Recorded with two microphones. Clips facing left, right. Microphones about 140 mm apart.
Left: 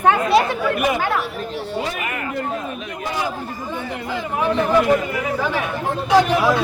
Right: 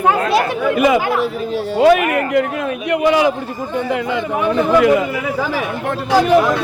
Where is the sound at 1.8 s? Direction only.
75° right (ahead or behind).